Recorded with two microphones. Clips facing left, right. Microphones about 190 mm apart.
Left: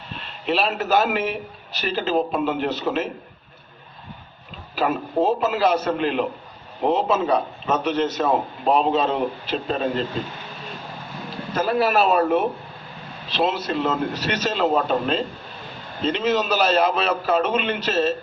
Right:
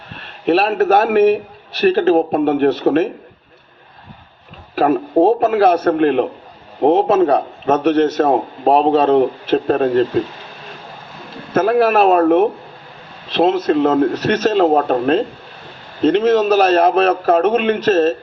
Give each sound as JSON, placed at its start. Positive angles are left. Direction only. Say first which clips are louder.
{"t": 0.2, "sound": "a man's voice", "louder": "right 8 dB", "side_deg": -55}
{"t": 4.7, "sound": "a man's voice", "louder": "right 8 dB", "side_deg": -55}
{"t": 11.5, "sound": "a man's voice", "louder": "right 7 dB", "side_deg": -65}